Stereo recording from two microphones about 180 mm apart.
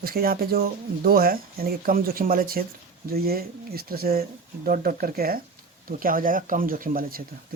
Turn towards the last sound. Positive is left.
turn(degrees=-55)  # may be behind; listen again after turning